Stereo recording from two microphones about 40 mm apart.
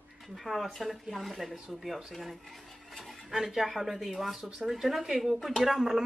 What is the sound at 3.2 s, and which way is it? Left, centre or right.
Speech, centre.